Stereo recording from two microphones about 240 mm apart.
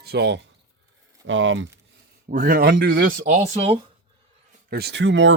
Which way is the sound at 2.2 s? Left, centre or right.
Right.